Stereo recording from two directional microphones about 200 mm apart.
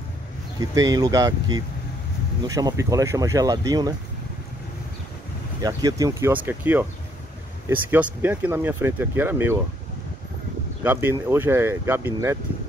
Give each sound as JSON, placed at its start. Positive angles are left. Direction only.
{"t": 0.6, "sound": "speech", "side_deg": -20}
{"t": 5.6, "sound": "speech", "side_deg": -20}
{"t": 10.8, "sound": "speech", "side_deg": -10}